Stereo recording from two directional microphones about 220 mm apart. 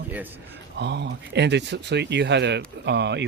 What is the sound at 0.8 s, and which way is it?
Speech, 50° right (ahead or behind).